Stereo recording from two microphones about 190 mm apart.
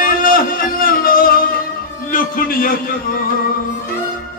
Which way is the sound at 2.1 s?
45° left (ahead or behind).